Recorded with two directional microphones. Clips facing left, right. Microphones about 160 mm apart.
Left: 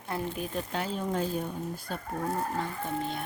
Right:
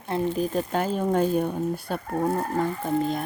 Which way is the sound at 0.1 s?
35° right (ahead or behind).